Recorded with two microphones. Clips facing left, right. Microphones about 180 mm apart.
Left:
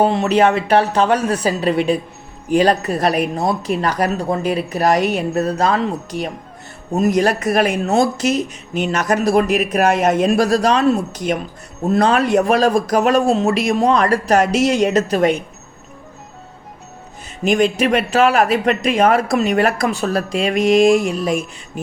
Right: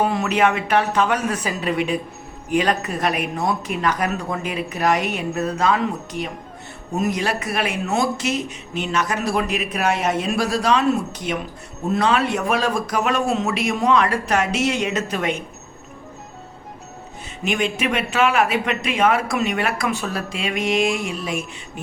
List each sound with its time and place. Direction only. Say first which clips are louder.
0.0 s speech: left 5 dB; 30° left (ahead or behind)
17.4 s speech: left 7 dB; 40° left (ahead or behind)